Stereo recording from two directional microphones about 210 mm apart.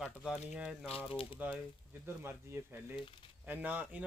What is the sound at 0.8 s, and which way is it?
Speech, 25° left (ahead or behind).